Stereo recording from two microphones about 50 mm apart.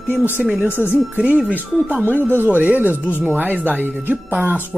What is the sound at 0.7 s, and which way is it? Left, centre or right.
Speech, left.